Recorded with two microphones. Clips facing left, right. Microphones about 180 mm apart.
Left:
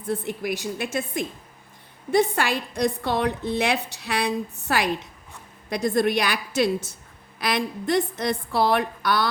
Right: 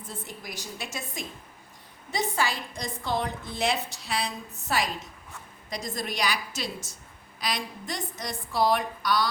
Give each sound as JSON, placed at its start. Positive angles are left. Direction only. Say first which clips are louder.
{"t": 0.1, "sound": "a woman's voice", "louder": "left 14 dB", "side_deg": 65}